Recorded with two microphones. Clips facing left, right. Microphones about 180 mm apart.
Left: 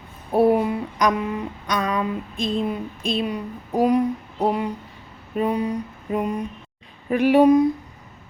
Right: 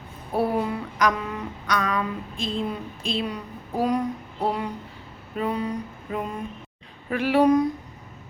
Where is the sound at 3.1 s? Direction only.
20° left (ahead or behind).